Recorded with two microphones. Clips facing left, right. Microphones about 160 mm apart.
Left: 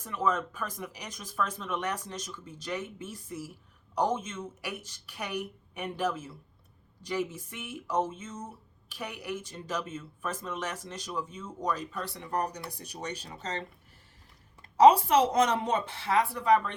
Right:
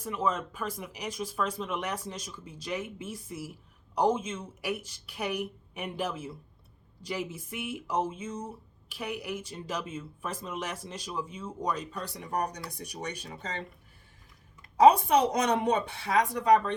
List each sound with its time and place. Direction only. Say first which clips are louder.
0.3 s speech: even; 10° right (ahead or behind)
15.0 s speech: left 1 dB; 15° right (ahead or behind)